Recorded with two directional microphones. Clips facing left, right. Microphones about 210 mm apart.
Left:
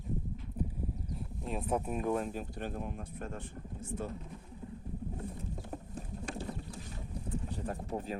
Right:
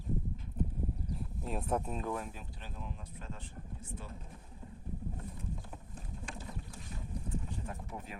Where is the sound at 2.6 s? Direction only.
55° left (ahead or behind).